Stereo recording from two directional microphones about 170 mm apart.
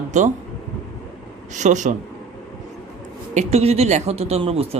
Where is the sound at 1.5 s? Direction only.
45° right (ahead or behind).